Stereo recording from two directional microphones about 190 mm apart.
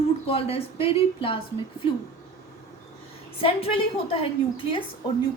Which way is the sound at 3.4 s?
30° left (ahead or behind).